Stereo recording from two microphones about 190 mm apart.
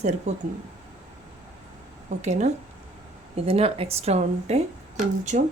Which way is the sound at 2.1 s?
40° right (ahead or behind).